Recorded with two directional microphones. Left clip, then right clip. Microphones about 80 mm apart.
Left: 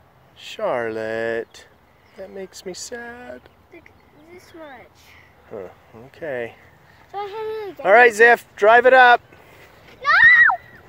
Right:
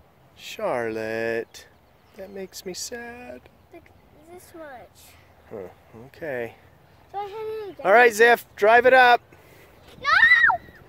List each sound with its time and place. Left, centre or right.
0.4 s speech: right
5.5 s speech: right
7.2 s speech: left
7.8 s speech: right
10.0 s a sound: left